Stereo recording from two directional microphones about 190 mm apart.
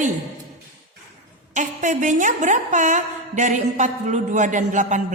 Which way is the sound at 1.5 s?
40° right (ahead or behind).